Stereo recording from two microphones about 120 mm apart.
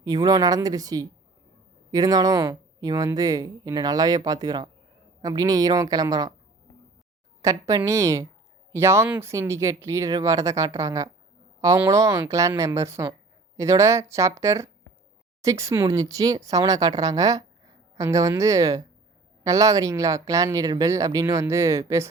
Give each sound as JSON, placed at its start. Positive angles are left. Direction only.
{"t": 0.0, "sound": "speech", "side_deg": -30}
{"t": 7.4, "sound": "speech", "side_deg": -30}